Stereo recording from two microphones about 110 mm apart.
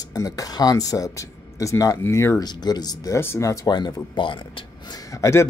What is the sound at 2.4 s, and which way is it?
Speech, 40° left (ahead or behind).